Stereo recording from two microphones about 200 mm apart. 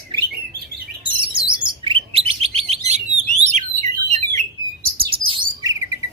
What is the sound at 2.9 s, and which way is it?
Alarm, 35° right (ahead or behind).